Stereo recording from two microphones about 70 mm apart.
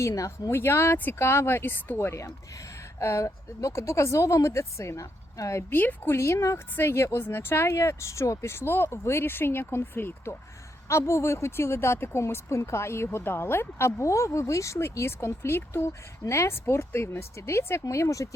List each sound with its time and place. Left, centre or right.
0.0 s a woman's voice: left
0.5 s a woman's voice: left
5.7 s speech: left
7.7 s speech: left
10.8 s speech: left